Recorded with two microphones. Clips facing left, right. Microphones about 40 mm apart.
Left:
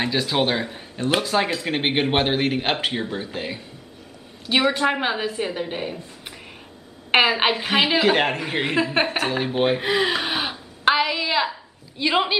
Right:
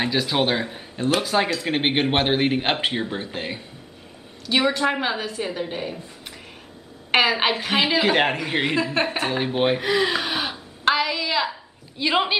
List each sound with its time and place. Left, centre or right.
0.0 s a man's voice: centre
4.5 s a woman's voice: centre
7.1 s a woman's voice: centre
8.5 s a woman's voice: centre
9.8 s a woman's voice: centre
10.9 s a sound: centre
12.0 s a man's voice: centre